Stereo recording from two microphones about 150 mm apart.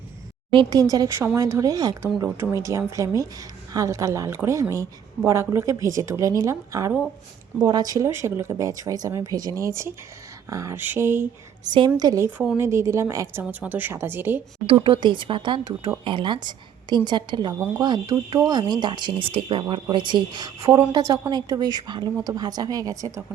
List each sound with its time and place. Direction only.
0.5 s a woman's voice: 35° right (ahead or behind)
0.9 s a woman's voice: 20° right (ahead or behind)
14.8 s a woman's voice: 30° right (ahead or behind)